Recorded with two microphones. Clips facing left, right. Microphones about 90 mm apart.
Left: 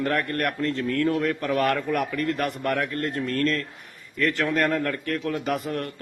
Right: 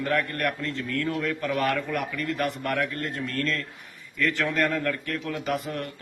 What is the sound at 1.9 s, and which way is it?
Speech, 55° left (ahead or behind).